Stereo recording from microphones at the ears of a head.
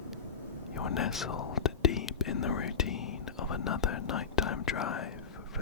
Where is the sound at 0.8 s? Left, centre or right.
Left.